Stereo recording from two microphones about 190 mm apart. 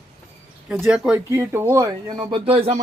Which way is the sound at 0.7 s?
5° right (ahead or behind).